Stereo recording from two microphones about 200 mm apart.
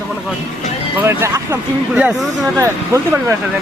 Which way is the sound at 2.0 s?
5° right (ahead or behind).